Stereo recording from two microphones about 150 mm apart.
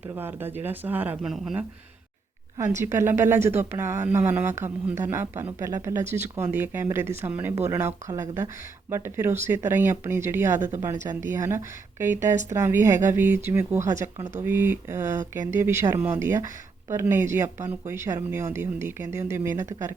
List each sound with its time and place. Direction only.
0.1 s speech: 15° right (ahead or behind)
2.6 s speech: 15° right (ahead or behind)